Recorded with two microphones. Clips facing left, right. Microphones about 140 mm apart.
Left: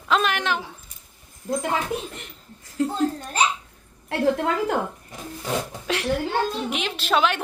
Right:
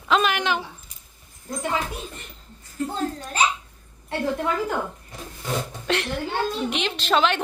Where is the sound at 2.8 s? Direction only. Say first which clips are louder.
Left 4 dB; 90° left.